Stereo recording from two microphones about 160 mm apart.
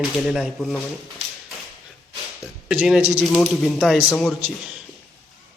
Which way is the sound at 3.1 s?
5° right (ahead or behind).